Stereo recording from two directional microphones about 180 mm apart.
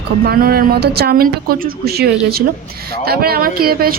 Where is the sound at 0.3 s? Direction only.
55° right (ahead or behind).